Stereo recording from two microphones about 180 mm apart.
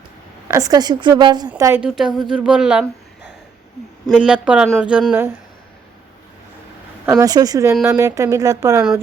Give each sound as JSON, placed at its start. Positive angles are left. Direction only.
{"t": 0.4, "sound": "a woman's voice", "side_deg": -20}
{"t": 1.8, "sound": "speech", "side_deg": -5}
{"t": 4.0, "sound": "speech", "side_deg": -5}
{"t": 7.0, "sound": "a woman's voice", "side_deg": -15}